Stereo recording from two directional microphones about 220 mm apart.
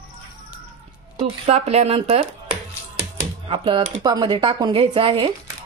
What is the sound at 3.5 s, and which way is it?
Speech, 25° right (ahead or behind).